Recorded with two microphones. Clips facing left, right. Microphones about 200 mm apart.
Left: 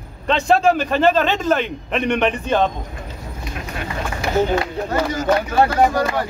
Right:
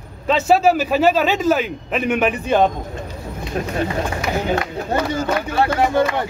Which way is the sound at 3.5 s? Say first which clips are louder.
Right 11 dB; 35° right (ahead or behind).